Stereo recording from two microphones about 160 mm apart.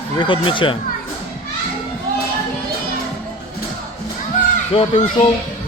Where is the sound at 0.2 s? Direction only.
30° left (ahead or behind).